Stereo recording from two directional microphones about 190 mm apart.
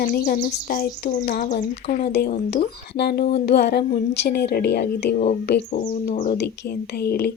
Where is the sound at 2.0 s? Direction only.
50° left (ahead or behind).